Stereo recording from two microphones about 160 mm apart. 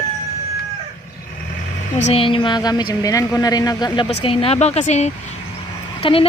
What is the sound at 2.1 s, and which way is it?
A woman's voice, 35° left (ahead or behind).